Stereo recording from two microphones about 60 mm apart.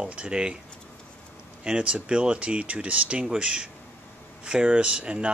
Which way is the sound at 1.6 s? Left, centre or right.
Centre.